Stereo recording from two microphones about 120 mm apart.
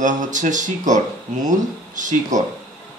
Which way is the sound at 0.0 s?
90° right.